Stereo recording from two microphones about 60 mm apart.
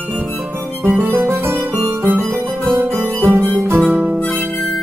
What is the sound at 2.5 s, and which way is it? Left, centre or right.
Music, centre.